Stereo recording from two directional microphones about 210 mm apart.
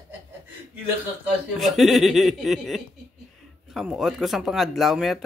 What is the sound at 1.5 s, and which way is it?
Speech, centre (ahead or behind).